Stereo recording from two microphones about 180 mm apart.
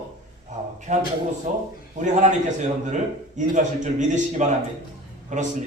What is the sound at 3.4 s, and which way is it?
A man's voice, 45° right (ahead or behind).